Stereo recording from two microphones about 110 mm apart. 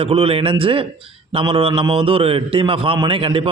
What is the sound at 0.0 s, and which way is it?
A man's voice, 60° right (ahead or behind).